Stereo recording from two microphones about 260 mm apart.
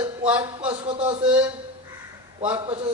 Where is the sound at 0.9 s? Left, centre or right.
Centre.